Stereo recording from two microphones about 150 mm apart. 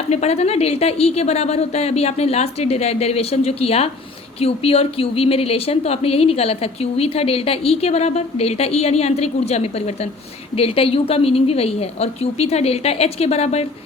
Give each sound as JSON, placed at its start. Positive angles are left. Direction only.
{"t": 0.1, "sound": "a woman's voice", "side_deg": 45}